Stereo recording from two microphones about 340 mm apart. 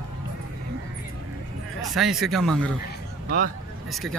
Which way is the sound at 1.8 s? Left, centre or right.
Centre.